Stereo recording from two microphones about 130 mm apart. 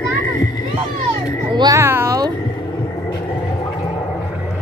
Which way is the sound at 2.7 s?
30° left (ahead or behind).